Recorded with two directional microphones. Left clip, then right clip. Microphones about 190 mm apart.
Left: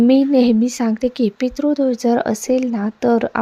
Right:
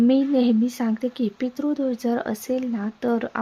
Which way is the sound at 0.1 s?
35° left (ahead or behind).